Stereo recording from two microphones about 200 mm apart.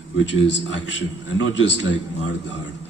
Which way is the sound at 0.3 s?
65° left (ahead or behind).